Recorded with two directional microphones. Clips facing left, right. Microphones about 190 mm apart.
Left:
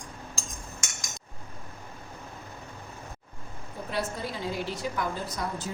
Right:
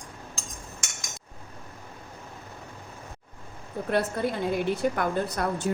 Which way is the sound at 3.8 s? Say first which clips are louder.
Right 6 dB; 60° right (ahead or behind).